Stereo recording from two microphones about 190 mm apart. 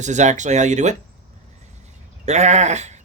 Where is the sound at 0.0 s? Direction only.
40° right (ahead or behind).